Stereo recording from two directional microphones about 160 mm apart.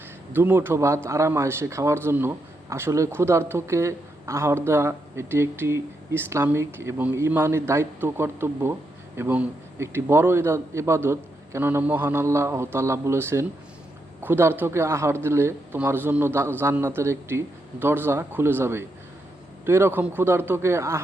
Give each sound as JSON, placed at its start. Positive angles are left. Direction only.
{"t": 0.3, "sound": "a man's voice", "side_deg": -15}